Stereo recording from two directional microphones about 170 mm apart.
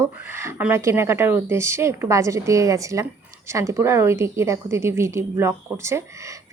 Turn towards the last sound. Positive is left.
turn(degrees=-15)  # may be behind; listen again after turning